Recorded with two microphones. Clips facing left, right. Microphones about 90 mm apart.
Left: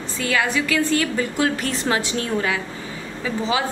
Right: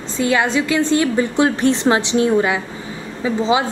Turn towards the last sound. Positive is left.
turn(degrees=-20)  # may be behind; listen again after turning